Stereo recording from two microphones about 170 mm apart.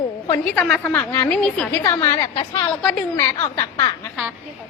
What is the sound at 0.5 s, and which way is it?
Speech, centre (ahead or behind).